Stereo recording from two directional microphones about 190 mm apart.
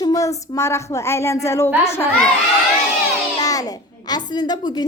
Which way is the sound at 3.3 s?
20° left (ahead or behind).